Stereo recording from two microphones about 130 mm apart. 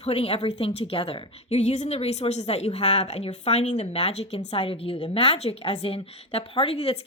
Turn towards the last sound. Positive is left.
turn(degrees=50)  # may be behind; listen again after turning